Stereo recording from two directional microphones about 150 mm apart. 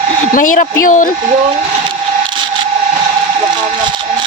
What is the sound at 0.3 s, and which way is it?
Speech, 60° left (ahead or behind).